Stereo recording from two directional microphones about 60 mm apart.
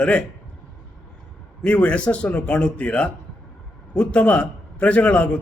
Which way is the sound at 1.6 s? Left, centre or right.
Left.